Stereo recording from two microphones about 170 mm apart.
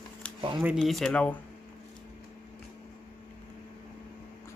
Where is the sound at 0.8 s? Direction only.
Centre (ahead or behind).